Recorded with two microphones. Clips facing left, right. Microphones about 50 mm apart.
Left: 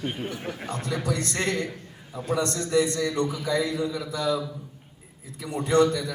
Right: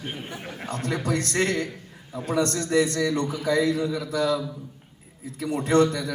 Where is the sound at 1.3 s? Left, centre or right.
Right.